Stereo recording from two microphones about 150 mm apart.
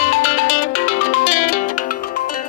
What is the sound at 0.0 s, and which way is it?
Music, 60° left (ahead or behind).